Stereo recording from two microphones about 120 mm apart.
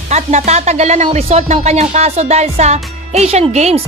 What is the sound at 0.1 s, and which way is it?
Speech, 70° right (ahead or behind).